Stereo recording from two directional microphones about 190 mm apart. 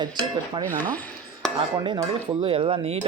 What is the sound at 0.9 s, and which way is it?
Chopping, 10° left (ahead or behind).